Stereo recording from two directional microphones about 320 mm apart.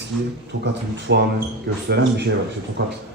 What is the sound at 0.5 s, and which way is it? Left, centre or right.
Speech, right.